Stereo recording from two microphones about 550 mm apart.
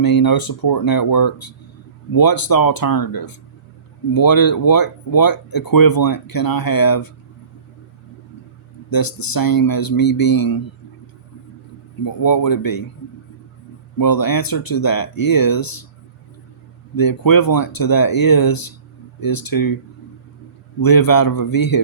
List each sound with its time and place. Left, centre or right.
0.0 s speech: left
8.9 s speech: left
12.0 s speech: left
14.0 s speech: left
16.9 s speech: left
20.8 s speech: left